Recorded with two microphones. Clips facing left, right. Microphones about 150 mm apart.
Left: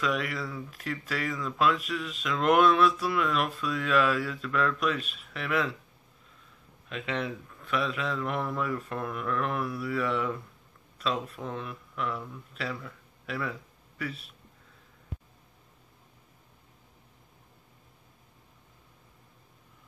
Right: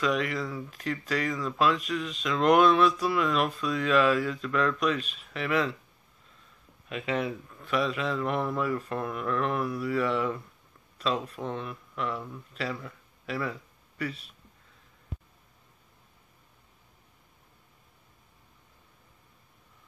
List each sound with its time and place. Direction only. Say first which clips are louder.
0.0 s speech: right 2 dB; 5° left (ahead or behind)
6.9 s speech: right 3 dB; 5° right (ahead or behind)